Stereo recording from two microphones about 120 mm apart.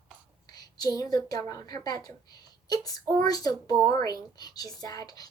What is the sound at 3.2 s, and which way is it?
Speech, 30° left (ahead or behind).